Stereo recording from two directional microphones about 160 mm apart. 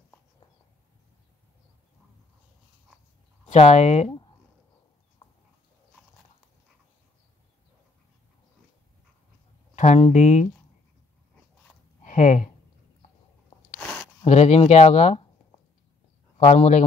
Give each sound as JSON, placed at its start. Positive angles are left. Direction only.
{"t": 3.4, "sound": "speech", "side_deg": 45}
{"t": 5.2, "sound": "horse", "side_deg": 35}
{"t": 9.8, "sound": "speech", "side_deg": 45}
{"t": 12.0, "sound": "a sound", "side_deg": 50}
{"t": 13.7, "sound": "a sound", "side_deg": 0}
{"t": 14.2, "sound": "speech", "side_deg": 45}
{"t": 16.4, "sound": "speech", "side_deg": 45}